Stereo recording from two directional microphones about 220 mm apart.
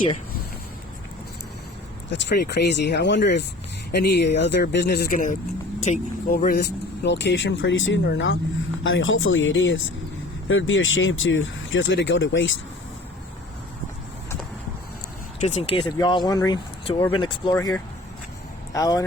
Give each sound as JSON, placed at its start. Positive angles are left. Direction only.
{"t": 2.0, "sound": "speech", "side_deg": 50}
{"t": 7.0, "sound": "speech", "side_deg": 55}
{"t": 15.4, "sound": "speech", "side_deg": 30}